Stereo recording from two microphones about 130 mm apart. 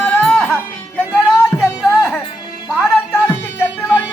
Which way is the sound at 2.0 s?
15° left (ahead or behind).